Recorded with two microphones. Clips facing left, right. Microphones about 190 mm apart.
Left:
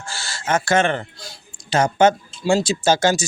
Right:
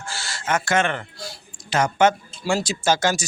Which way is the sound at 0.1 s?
30° left (ahead or behind).